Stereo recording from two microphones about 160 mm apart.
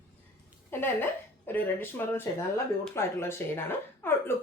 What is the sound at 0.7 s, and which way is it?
A woman's voice, 10° left (ahead or behind).